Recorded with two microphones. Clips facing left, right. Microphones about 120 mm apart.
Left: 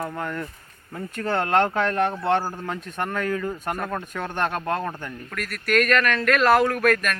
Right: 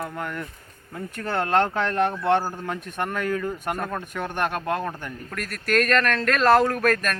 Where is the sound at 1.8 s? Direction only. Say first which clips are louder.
Even; 20° right (ahead or behind).